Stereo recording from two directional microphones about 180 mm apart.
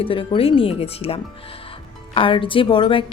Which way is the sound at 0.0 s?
30° left (ahead or behind).